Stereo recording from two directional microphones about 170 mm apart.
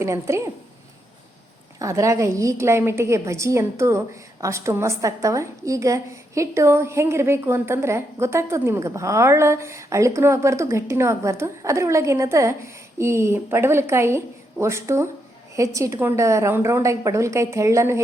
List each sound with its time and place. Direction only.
0.0 s a woman's voice: 15° right (ahead or behind)
1.8 s a woman's voice: 20° right (ahead or behind)